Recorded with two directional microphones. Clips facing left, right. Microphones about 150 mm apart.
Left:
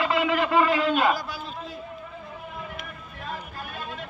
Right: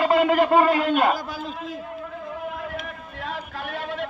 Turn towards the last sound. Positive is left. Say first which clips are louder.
# right 6 dB
turn(degrees=-70)  # may be behind; listen again after turning